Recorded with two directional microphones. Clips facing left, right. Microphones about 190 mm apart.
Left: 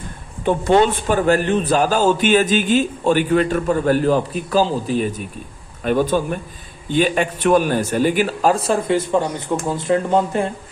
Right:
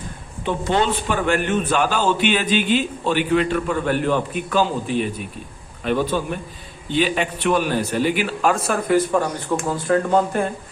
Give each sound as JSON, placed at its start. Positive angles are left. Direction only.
{"t": 0.4, "sound": "a man's voice", "side_deg": 50}